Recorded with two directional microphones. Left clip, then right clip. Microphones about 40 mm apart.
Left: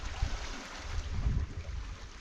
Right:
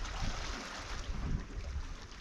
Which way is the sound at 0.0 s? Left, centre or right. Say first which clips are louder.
Right 1 dB; right.